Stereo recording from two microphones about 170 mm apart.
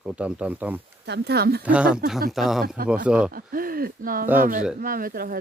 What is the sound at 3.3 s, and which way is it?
Speech, 60° right (ahead or behind).